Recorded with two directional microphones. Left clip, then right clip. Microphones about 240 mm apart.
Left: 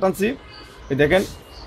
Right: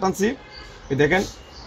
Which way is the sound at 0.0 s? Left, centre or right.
Centre.